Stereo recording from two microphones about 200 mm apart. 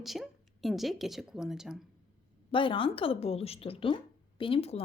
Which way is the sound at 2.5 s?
25° left (ahead or behind).